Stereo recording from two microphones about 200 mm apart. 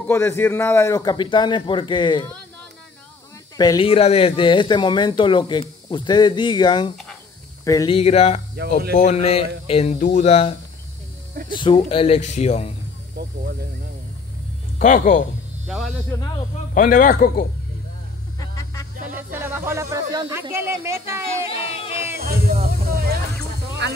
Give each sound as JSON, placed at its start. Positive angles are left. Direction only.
{"t": 0.0, "sound": "speech", "side_deg": 10}
{"t": 3.5, "sound": "speech", "side_deg": 20}
{"t": 7.9, "sound": "speech", "side_deg": 30}
{"t": 14.8, "sound": "speech", "side_deg": 40}
{"t": 15.6, "sound": "speech", "side_deg": -5}
{"t": 16.1, "sound": "speech", "side_deg": 15}
{"t": 16.7, "sound": "speech", "side_deg": 40}
{"t": 18.5, "sound": "a sound", "side_deg": 15}
{"t": 19.0, "sound": "speech", "side_deg": -10}
{"t": 21.5, "sound": "a sound", "side_deg": 30}
{"t": 22.2, "sound": "snake", "side_deg": -50}